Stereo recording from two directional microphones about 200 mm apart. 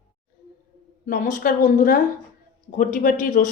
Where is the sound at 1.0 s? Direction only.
40° left (ahead or behind).